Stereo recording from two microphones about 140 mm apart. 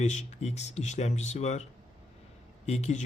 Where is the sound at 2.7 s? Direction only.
55° left (ahead or behind).